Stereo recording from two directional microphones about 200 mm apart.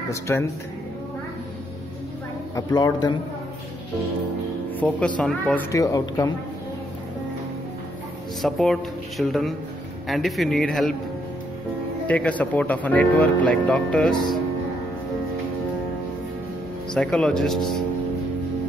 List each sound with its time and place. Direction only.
0.1 s speech: 10° left (ahead or behind)
2.5 s speech: 20° left (ahead or behind)
4.7 s speech: 5° left (ahead or behind)
8.4 s speech: centre (ahead or behind)
12.1 s speech: 5° left (ahead or behind)
16.9 s speech: 5° left (ahead or behind)